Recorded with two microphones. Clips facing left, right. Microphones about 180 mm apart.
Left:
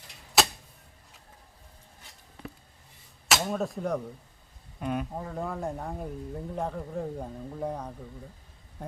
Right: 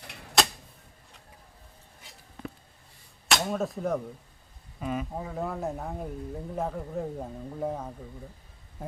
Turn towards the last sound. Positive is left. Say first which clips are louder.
# right 1 dB
turn(degrees=-5)  # may be behind; listen again after turning